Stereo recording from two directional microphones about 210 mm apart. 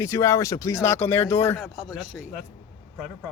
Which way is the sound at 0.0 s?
15° left (ahead or behind).